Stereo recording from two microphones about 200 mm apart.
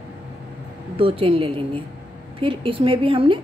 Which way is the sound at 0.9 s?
25° right (ahead or behind).